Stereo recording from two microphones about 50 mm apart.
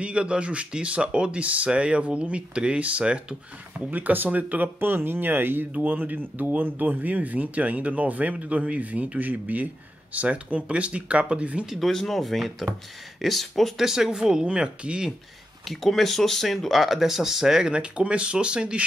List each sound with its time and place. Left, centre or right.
0.0 s speech: right
3.9 s speech: right
11.8 s speech: centre; by 15.0 s right
15.6 s speech: centre